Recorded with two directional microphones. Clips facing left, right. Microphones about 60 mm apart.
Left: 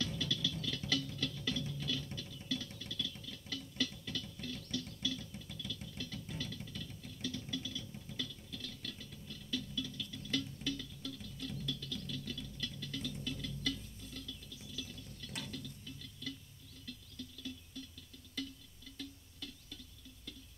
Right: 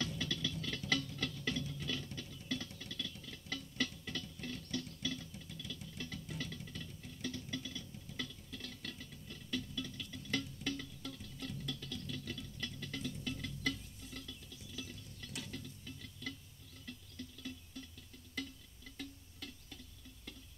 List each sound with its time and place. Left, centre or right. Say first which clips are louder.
0.2 s music: left 1 dB; right
2.1 s patter: left 1 dB; right
2.8 s a sound: left 2 dB; right
5.9 s music: right 2 dB; right
14.8 s drip: even; right
15.4 s music: left 1 dB; right
16.8 s a sound: even; right
18.9 s music: even; right